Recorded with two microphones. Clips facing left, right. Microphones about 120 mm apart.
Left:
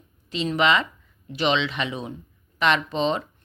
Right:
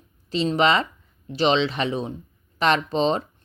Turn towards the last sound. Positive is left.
turn(degrees=-35)  # may be behind; listen again after turning